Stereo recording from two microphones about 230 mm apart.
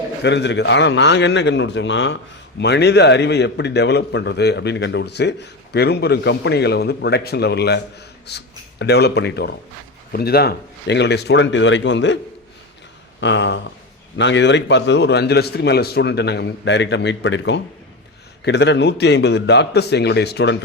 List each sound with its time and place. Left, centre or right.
0.2 s a man's voice: left